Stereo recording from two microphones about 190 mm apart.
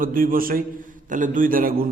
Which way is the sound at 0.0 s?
50° right (ahead or behind).